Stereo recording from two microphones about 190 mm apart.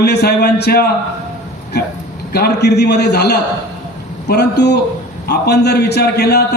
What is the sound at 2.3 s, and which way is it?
A man's voice, 60° left (ahead or behind).